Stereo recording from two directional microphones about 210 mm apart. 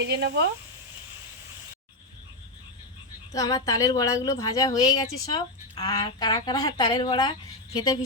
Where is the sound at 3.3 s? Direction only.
15° left (ahead or behind).